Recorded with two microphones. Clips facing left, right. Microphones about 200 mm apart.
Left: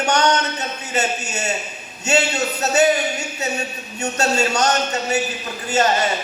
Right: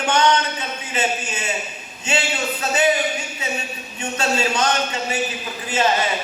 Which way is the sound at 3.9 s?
45° left (ahead or behind).